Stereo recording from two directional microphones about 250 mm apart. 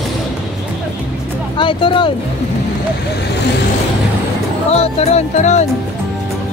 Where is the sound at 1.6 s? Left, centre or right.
Centre.